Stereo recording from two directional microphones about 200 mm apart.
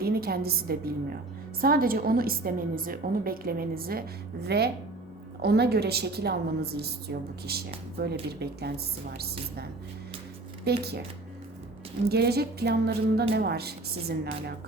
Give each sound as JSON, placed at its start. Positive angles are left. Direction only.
{"t": 0.0, "sound": "a woman's voice", "side_deg": -50}
{"t": 10.7, "sound": "speech", "side_deg": -55}
{"t": 12.0, "sound": "a woman's voice", "side_deg": -55}